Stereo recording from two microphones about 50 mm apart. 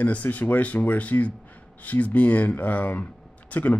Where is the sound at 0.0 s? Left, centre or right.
Left.